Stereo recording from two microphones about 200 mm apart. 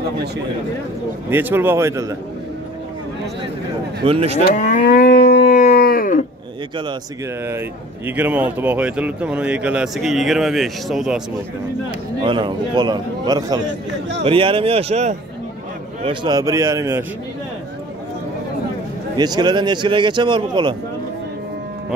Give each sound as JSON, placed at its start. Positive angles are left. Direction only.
{"t": 1.3, "sound": "a man's voice", "side_deg": -10}
{"t": 4.0, "sound": "speech", "side_deg": -30}
{"t": 4.4, "sound": "livestock", "side_deg": 40}
{"t": 5.3, "sound": "a sound", "side_deg": 40}
{"t": 8.2, "sound": "speech", "side_deg": -10}
{"t": 12.2, "sound": "speech", "side_deg": -25}
{"t": 13.6, "sound": "a man's voice", "side_deg": -65}
{"t": 14.2, "sound": "a man's voice", "side_deg": -25}
{"t": 19.1, "sound": "speech", "side_deg": -20}